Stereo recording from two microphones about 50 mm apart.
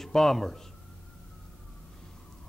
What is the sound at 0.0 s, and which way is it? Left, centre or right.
Speech, centre.